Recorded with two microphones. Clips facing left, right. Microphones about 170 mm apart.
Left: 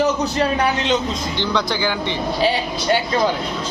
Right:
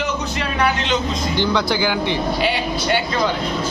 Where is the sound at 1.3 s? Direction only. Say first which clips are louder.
Right 4 dB; 10° right (ahead or behind).